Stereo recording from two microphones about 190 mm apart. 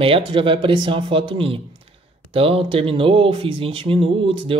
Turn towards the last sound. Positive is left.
turn(degrees=-30)  # may be behind; listen again after turning